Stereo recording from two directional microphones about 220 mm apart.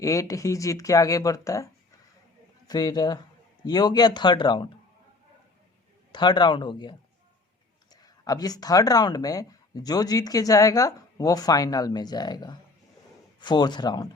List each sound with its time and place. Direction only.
0.0 s a man's voice: 15° left (ahead or behind)
6.1 s a man's voice: 20° left (ahead or behind)
8.0 s a man's voice: 15° left (ahead or behind)